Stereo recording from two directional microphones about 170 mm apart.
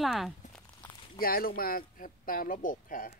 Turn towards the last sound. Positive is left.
turn(degrees=55)  # may be behind; listen again after turning